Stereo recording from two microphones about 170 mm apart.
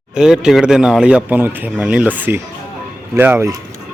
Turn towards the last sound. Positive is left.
turn(degrees=-15)  # may be behind; listen again after turning